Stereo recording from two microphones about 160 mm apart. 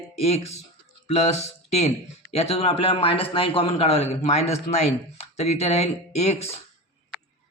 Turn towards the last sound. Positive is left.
turn(degrees=40)  # may be behind; listen again after turning